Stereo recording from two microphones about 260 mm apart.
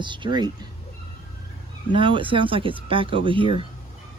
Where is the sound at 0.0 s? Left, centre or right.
Centre.